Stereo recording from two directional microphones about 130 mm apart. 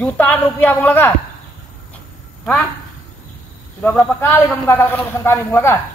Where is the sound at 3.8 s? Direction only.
10° left (ahead or behind).